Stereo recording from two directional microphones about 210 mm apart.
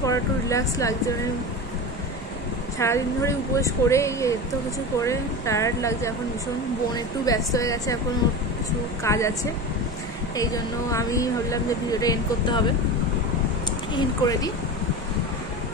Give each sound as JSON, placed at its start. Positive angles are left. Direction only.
{"t": 0.0, "sound": "speech", "side_deg": 15}
{"t": 2.8, "sound": "a woman's voice", "side_deg": 15}
{"t": 7.2, "sound": "a woman's voice", "side_deg": 15}
{"t": 9.0, "sound": "a woman's voice", "side_deg": 15}
{"t": 13.9, "sound": "a woman's voice", "side_deg": 15}